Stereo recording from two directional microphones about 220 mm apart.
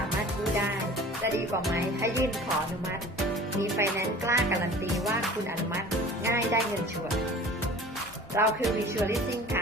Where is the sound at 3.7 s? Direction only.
15° right (ahead or behind).